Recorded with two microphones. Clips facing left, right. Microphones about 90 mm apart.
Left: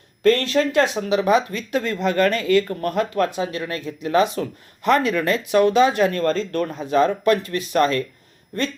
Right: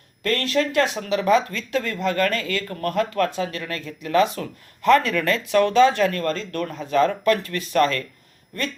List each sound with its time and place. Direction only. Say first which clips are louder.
0.2 s speech: left 5 dB; 25° left (ahead or behind)